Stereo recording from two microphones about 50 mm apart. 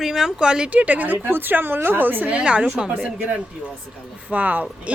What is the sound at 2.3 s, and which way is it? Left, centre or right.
Speech, right.